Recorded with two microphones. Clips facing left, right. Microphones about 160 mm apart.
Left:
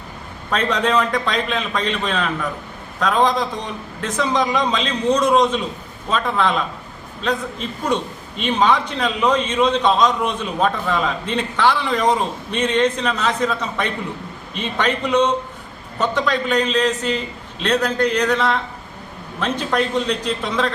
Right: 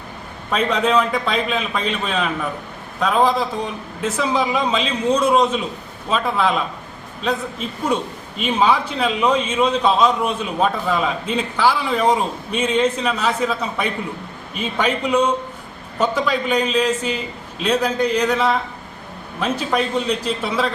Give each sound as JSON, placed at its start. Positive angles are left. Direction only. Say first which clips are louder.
{"t": 0.5, "sound": "a man's voice", "louder": "right 1 dB", "side_deg": -5}